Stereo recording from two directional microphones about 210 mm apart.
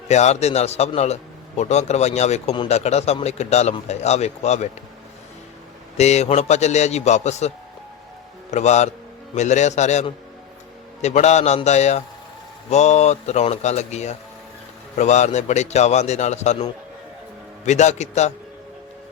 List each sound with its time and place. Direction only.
0.1 s a man's voice: 30° left (ahead or behind)
6.0 s a man's voice: 30° left (ahead or behind)
17.7 s a man's voice: 35° left (ahead or behind)